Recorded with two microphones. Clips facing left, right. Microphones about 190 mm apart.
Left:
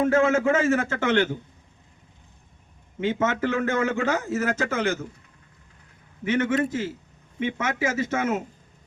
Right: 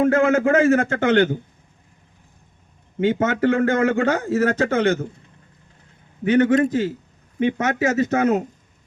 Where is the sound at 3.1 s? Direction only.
35° right (ahead or behind).